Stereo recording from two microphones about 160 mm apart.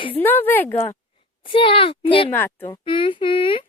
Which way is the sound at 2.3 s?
15° left (ahead or behind).